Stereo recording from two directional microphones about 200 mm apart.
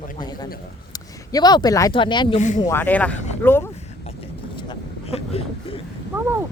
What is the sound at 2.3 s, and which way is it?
Speech, 35° left (ahead or behind).